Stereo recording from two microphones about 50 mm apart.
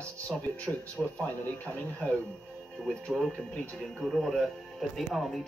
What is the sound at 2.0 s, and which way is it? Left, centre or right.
Speech, left.